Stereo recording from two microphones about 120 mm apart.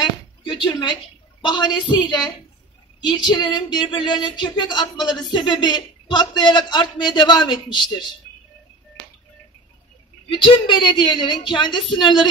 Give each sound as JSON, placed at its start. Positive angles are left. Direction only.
{"t": 0.0, "sound": "a sound", "side_deg": 40}
{"t": 1.4, "sound": "a man's voice", "side_deg": 40}
{"t": 10.3, "sound": "a man's voice", "side_deg": 40}